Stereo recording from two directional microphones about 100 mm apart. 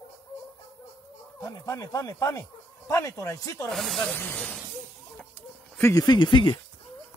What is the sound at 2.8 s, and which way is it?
Speech, 30° left (ahead or behind).